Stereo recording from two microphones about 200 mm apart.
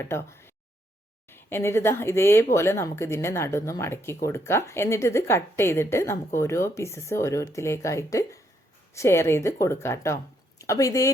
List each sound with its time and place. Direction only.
0.0 s speech: 10° left (ahead or behind)